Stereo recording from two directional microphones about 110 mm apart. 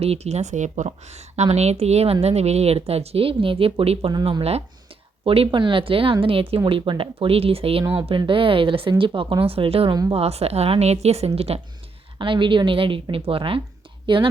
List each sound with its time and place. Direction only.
0.0 s a woman's voice: 70° right (ahead or behind)
4.1 s speech: 45° right (ahead or behind)
5.2 s a woman's voice: 55° right (ahead or behind)
12.2 s speech: 50° right (ahead or behind)